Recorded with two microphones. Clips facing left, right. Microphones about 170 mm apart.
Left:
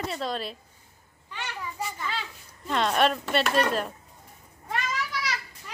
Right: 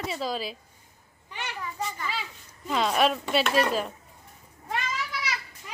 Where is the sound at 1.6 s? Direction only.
5° left (ahead or behind).